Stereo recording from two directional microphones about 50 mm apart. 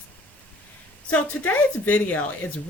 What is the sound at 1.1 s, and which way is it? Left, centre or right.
Speech, left.